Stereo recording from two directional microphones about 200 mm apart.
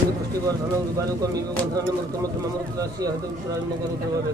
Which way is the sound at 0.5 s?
15° right (ahead or behind).